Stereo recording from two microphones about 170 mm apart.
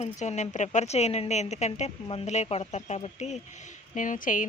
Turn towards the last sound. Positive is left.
turn(degrees=50)  # may be behind; listen again after turning